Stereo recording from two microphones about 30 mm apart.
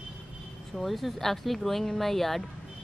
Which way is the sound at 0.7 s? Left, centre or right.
Centre.